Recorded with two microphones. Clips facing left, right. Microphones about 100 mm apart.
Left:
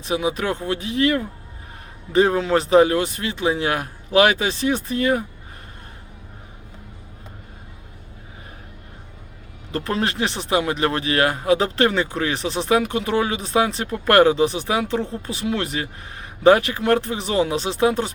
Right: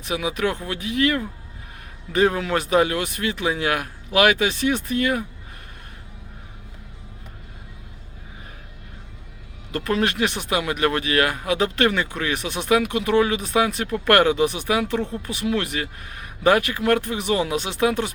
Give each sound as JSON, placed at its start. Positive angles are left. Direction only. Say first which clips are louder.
{"t": 0.0, "sound": "speech", "louder": "left 1 dB", "side_deg": 30}
{"t": 9.7, "sound": "speech", "louder": "right 1 dB", "side_deg": 30}